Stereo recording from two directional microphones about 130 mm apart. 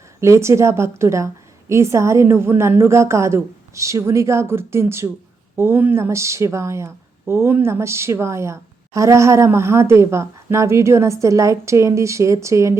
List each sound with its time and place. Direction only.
0.2 s speech: 20° right (ahead or behind)